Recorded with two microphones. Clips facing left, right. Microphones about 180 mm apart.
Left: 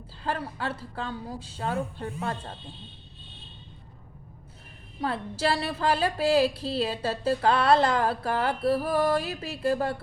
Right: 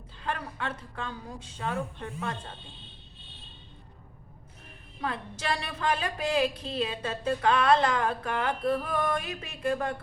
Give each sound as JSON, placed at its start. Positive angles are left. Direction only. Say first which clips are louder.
{"t": 0.2, "sound": "speech", "louder": "left 3 dB", "side_deg": 30}
{"t": 4.9, "sound": "speech", "louder": "left 5 dB", "side_deg": 30}